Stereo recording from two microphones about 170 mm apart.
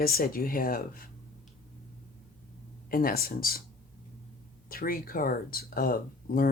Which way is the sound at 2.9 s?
55° left (ahead or behind).